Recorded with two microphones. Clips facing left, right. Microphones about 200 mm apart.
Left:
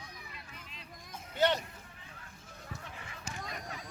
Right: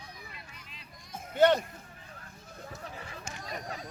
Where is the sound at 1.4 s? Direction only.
50° right (ahead or behind).